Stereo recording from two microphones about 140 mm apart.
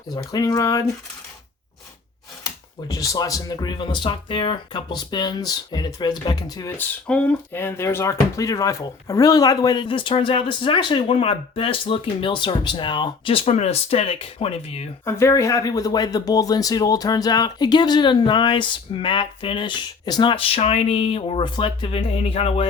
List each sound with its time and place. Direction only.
0.1 s speech: 25° left (ahead or behind)
2.9 s speech: 25° left (ahead or behind)
6.7 s speech: 10° left (ahead or behind); by 14.8 s 45° left (ahead or behind)
15.0 s speech: 20° left (ahead or behind); by 22.6 s 45° left (ahead or behind)